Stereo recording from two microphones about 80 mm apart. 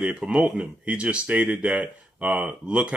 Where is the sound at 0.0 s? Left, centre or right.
Centre.